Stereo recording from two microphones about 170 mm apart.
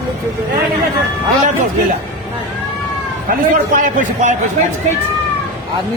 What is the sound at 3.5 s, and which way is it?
Speech, 50° right (ahead or behind).